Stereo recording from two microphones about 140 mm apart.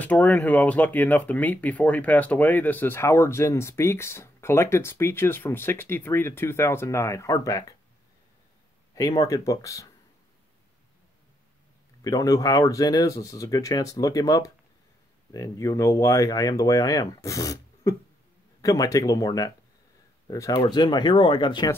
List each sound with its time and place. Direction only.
0.0 s speech: 10° left (ahead or behind)
9.2 s speech: 25° left (ahead or behind)
12.0 s speech: 25° left (ahead or behind)